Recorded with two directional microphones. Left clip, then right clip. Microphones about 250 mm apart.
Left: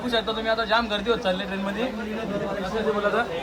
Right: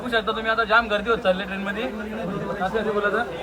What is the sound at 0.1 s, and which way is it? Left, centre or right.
A man's voice, centre.